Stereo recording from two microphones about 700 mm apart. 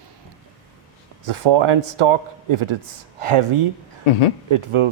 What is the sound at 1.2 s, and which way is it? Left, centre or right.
Speech, right.